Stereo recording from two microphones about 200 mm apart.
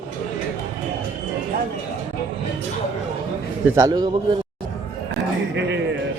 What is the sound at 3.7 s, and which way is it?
Speech, 20° right (ahead or behind).